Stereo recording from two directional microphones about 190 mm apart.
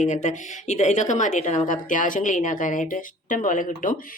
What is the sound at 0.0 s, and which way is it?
A woman's voice, 40° left (ahead or behind).